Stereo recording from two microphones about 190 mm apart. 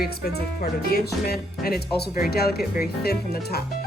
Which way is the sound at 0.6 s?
55° left (ahead or behind).